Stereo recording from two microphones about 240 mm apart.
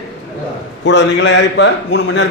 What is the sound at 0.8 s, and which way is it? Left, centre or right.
Speech, left.